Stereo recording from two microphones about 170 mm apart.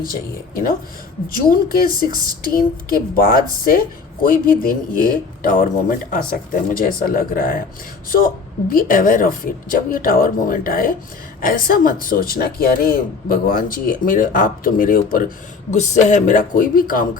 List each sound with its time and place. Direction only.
0.0 s speech: 60° left (ahead or behind)
8.7 s speech: 55° left (ahead or behind)
15.7 s speech: 45° left (ahead or behind)